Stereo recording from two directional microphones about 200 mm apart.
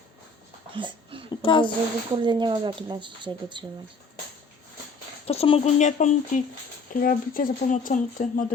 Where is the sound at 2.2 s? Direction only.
25° right (ahead or behind).